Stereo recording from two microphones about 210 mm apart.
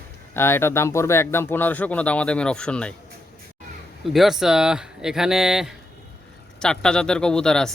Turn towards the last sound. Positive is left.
turn(degrees=5)  # may be behind; listen again after turning